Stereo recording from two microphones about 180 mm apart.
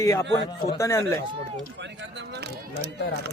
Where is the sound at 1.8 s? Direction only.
80° right.